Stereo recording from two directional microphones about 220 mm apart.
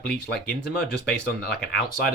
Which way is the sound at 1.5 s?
45° left (ahead or behind).